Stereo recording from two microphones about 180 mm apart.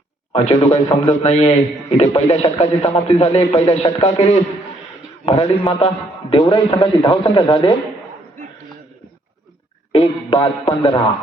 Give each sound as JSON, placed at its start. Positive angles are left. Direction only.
{"t": 0.3, "sound": "a man's voice", "side_deg": 35}
{"t": 9.9, "sound": "a man's voice", "side_deg": 30}